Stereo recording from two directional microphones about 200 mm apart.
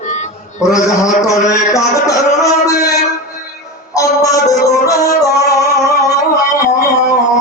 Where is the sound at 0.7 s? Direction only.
15° left (ahead or behind).